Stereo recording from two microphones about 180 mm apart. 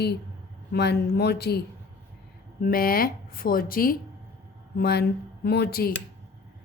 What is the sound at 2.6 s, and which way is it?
A woman's voice, 55° left (ahead or behind).